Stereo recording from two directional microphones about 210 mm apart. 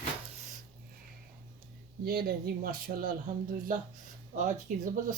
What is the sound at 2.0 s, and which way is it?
Speech, 45° right (ahead or behind).